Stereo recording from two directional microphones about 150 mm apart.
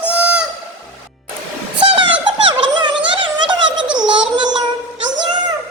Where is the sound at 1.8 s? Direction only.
35° right (ahead or behind).